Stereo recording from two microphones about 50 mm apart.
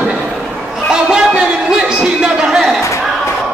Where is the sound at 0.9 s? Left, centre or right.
Centre.